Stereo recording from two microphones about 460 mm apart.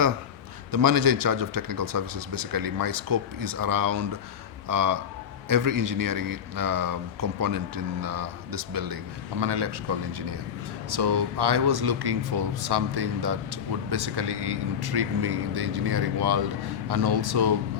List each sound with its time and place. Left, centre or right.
0.7 s speech: right
9.4 s speech: right